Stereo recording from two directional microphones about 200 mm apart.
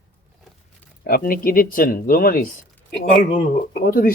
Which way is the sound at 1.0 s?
50° left (ahead or behind).